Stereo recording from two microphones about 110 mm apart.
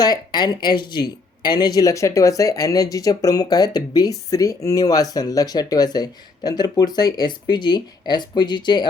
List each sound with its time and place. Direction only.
0.0 s speech: 40° left (ahead or behind)